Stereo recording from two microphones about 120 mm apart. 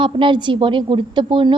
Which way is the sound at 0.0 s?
45° right (ahead or behind).